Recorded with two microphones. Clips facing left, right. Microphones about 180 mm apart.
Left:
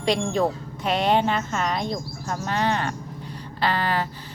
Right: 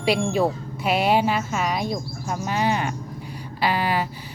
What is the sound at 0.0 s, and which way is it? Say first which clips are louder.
Speech: right 1 dB; 10° right (ahead or behind).